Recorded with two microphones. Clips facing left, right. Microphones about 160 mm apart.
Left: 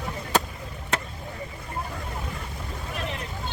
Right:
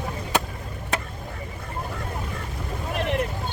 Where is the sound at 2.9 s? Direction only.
60° right (ahead or behind).